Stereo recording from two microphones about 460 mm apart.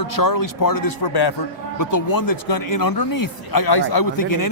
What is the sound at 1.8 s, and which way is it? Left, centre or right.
Speech, left.